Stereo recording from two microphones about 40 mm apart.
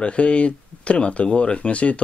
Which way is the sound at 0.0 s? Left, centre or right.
Left.